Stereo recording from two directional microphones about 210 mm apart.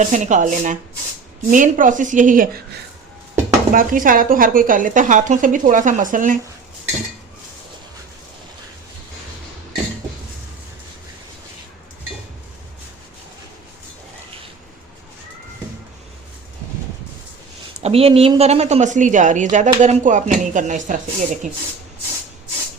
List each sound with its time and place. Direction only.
0.0 s a woman's voice: 35° right (ahead or behind)
3.7 s a woman's voice: 40° right (ahead or behind)
17.7 s a woman's voice: 30° right (ahead or behind)